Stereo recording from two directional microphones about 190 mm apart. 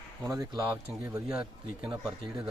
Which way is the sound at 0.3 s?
20° right (ahead or behind).